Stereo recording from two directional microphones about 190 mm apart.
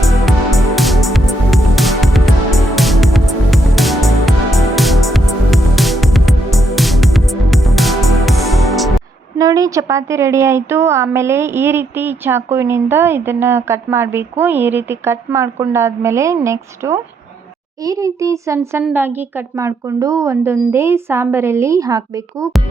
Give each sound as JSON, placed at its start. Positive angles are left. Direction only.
{"t": 0.3, "sound": "music", "side_deg": 0}
{"t": 9.4, "sound": "a woman's voice", "side_deg": -20}